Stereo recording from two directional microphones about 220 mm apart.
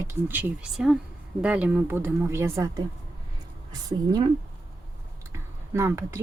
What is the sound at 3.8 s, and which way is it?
A woman's voice, 15° right (ahead or behind).